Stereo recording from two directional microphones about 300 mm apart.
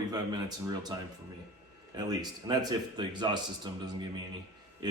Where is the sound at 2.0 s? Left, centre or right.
Centre.